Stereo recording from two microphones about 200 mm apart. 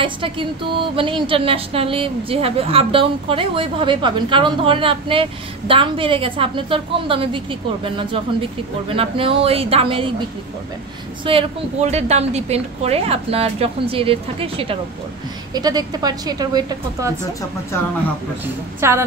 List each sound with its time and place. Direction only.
0.0 s a woman's voice: 25° right (ahead or behind)
11.2 s a woman's voice: 30° right (ahead or behind)
18.8 s a woman's voice: 15° right (ahead or behind)